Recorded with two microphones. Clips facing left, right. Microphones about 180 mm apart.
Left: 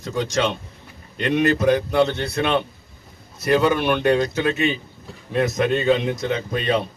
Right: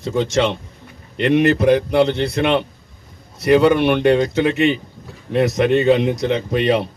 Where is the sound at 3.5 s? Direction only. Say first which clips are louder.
Right 5 dB; 15° right (ahead or behind).